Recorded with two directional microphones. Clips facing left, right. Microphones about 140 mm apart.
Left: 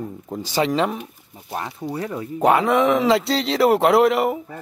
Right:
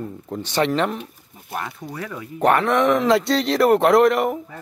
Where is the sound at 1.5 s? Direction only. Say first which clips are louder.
Left 3 dB; 25° left (ahead or behind).